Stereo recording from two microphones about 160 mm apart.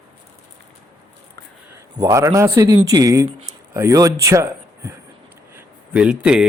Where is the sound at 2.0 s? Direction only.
20° right (ahead or behind).